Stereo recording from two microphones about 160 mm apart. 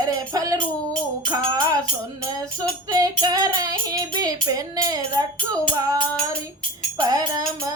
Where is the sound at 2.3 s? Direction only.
25° right (ahead or behind).